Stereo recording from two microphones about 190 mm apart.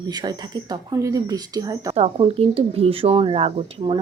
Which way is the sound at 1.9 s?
30° right (ahead or behind).